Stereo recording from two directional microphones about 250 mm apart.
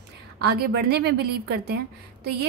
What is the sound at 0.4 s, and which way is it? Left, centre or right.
A woman's voice, right.